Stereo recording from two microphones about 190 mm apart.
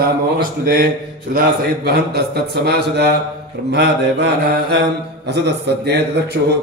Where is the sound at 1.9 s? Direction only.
60° right (ahead or behind).